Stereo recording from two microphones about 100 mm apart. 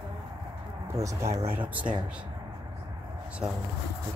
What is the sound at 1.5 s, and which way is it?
Speech, 15° right (ahead or behind).